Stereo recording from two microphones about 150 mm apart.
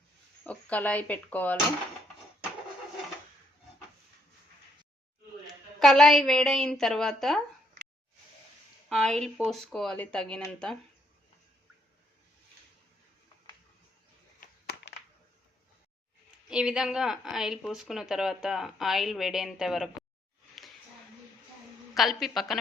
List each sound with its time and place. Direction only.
0.4 s speech: 10° left (ahead or behind)
5.8 s speech: centre (ahead or behind)
8.9 s speech: centre (ahead or behind)
14.4 s a sound: 60° left (ahead or behind)
16.5 s speech: 5° right (ahead or behind)
21.9 s speech: centre (ahead or behind)